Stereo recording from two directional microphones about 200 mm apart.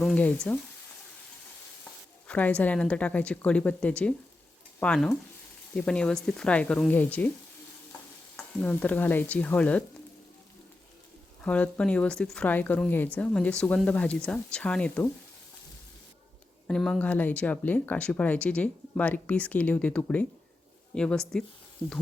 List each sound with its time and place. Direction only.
0.0 s speech: 5° left (ahead or behind)
2.2 s speech: 5° left (ahead or behind)
8.4 s speech: 10° left (ahead or behind)
11.4 s speech: 5° left (ahead or behind)
16.6 s speech: 5° left (ahead or behind)